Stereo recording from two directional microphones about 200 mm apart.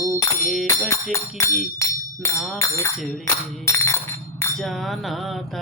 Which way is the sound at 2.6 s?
15° left (ahead or behind).